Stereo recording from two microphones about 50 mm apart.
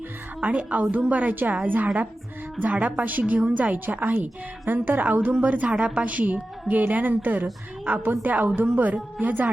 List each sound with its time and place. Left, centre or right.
0.4 s a woman's voice: right